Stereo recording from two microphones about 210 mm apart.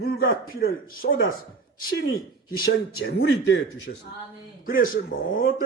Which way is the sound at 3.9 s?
50° left (ahead or behind).